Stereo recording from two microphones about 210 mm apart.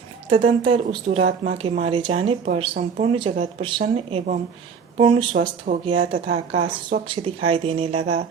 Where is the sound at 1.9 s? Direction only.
25° right (ahead or behind).